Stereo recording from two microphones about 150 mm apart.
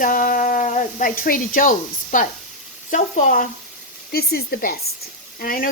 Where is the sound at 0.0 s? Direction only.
65° left (ahead or behind).